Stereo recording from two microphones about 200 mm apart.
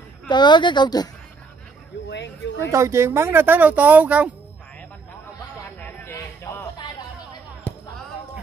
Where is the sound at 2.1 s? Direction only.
60° left (ahead or behind).